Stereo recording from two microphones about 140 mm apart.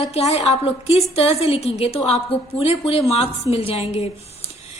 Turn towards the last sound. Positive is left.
turn(degrees=50)  # may be behind; listen again after turning